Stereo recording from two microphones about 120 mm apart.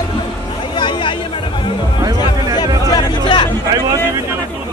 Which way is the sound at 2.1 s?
35° left (ahead or behind).